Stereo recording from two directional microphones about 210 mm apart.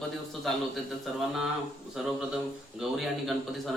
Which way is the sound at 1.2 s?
Centre (ahead or behind).